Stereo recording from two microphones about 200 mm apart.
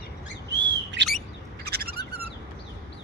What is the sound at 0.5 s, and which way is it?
Bird, 60° right (ahead or behind).